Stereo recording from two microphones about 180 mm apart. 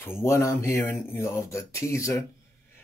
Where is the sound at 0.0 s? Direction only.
15° left (ahead or behind).